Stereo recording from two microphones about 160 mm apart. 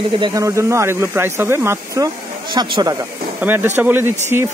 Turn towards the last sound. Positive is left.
turn(degrees=-15)  # may be behind; listen again after turning